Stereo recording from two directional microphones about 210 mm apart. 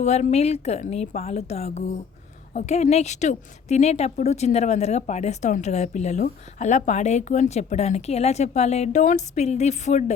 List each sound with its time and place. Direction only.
0.0 s speech: 35° left (ahead or behind)